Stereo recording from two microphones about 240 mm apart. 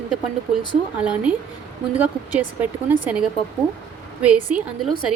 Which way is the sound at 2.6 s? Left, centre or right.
Centre.